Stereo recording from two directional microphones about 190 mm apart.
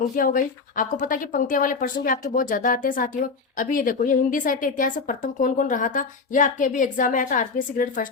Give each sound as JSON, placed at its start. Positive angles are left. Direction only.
{"t": 0.2, "sound": "a woman's voice", "side_deg": 45}